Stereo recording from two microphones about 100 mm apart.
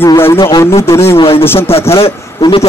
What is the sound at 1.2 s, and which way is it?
Speech, 70° left (ahead or behind).